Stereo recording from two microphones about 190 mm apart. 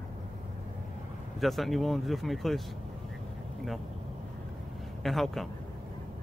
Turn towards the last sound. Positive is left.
turn(degrees=0)  # may be behind; listen again after turning